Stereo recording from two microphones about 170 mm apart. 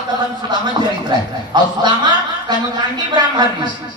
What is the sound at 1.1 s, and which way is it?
A man's voice, 25° right (ahead or behind).